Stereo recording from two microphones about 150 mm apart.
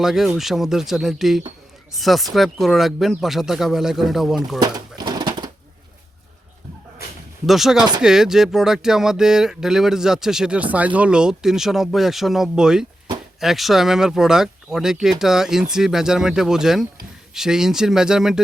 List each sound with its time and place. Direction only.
0.0 s speech: 5° right (ahead or behind)
4.6 s pigeon: 30° right (ahead or behind)
7.4 s speech: centre (ahead or behind)